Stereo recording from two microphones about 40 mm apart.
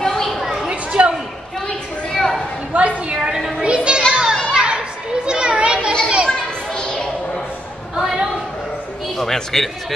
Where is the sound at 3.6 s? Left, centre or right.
Right.